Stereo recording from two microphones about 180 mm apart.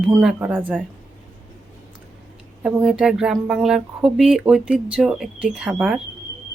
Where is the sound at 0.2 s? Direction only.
5° right (ahead or behind).